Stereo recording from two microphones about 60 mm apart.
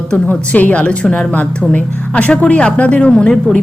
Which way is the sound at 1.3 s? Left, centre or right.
Left.